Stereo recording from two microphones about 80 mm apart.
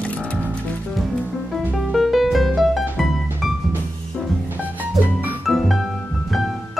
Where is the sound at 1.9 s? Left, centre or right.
Centre.